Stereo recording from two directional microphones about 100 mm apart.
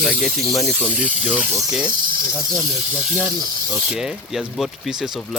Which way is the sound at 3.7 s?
5° right (ahead or behind).